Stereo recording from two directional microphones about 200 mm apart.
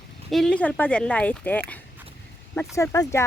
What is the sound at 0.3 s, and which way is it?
Speech, centre (ahead or behind).